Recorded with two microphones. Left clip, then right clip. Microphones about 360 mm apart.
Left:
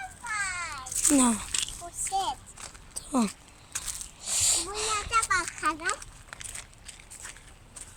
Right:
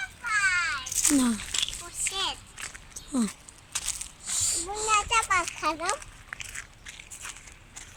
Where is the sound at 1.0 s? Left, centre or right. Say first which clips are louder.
Left 2 dB; centre.